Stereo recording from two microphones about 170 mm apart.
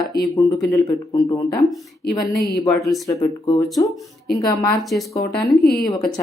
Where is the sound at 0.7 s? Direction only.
20° left (ahead or behind).